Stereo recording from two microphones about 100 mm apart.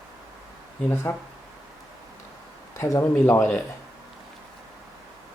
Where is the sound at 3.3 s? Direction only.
15° left (ahead or behind).